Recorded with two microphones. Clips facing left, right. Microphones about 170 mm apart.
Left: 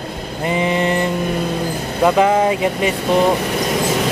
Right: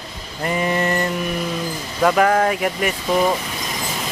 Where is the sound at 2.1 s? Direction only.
20° left (ahead or behind).